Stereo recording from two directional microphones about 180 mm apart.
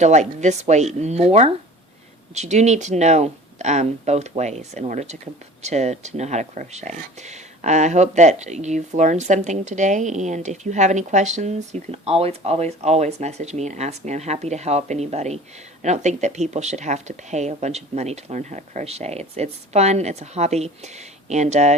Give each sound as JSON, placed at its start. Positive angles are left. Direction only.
{"t": 0.0, "sound": "speech", "side_deg": -40}